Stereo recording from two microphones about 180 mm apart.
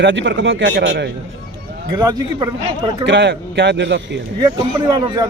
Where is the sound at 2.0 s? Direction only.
20° right (ahead or behind).